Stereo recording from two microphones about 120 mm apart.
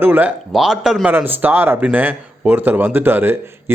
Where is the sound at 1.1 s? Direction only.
15° right (ahead or behind).